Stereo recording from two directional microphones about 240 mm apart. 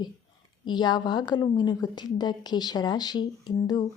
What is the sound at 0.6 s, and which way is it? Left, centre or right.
A woman's voice, centre.